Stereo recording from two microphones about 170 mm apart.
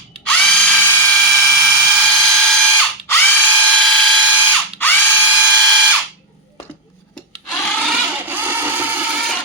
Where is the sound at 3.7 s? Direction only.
5° left (ahead or behind).